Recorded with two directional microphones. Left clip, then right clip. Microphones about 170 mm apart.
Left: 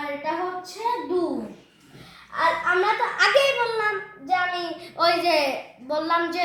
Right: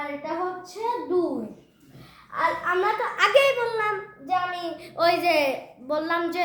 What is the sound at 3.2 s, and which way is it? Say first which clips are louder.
A child's voice: right 1 dB; 35° right (ahead or behind).